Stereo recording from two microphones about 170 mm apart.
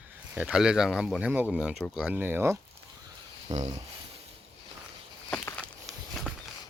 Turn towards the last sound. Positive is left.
turn(degrees=0)  # may be behind; listen again after turning